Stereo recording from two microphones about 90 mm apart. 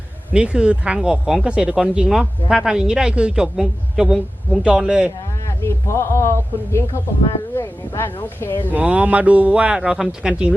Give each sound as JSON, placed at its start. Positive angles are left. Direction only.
{"t": 0.3, "sound": "speech", "side_deg": -10}
{"t": 5.6, "sound": "speech", "side_deg": 30}
{"t": 8.7, "sound": "speech", "side_deg": -15}